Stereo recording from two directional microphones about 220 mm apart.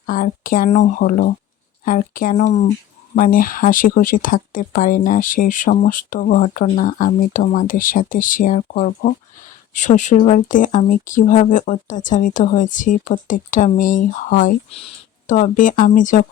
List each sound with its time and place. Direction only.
0.0 s speech: 40° left (ahead or behind)